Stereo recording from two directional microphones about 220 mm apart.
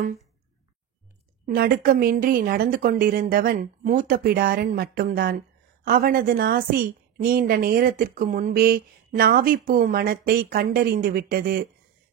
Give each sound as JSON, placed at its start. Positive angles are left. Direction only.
{"t": 1.4, "sound": "a woman's voice", "side_deg": -40}